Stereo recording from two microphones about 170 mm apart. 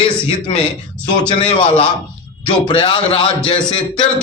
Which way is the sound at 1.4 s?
35° left (ahead or behind).